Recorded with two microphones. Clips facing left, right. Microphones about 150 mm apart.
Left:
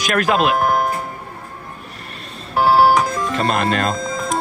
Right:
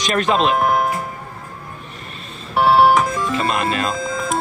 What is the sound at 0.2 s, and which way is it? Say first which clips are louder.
Speech: even; 5° left (ahead or behind).